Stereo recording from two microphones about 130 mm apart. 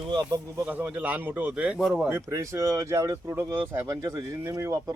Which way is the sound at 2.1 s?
25° right (ahead or behind).